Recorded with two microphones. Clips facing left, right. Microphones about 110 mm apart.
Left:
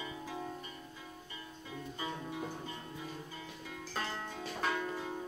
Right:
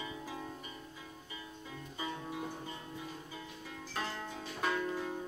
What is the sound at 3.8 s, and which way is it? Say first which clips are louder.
Music: even; centre (ahead or behind).